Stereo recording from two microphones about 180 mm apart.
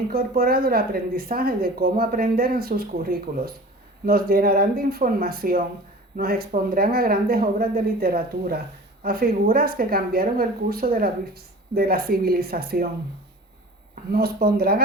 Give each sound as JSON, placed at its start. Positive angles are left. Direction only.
{"t": 0.1, "sound": "speech", "side_deg": -55}
{"t": 14.1, "sound": "speech", "side_deg": -55}